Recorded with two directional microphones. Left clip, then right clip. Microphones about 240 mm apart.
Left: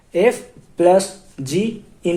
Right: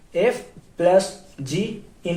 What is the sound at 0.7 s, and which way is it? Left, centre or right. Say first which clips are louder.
Speech: left 3 dB; left.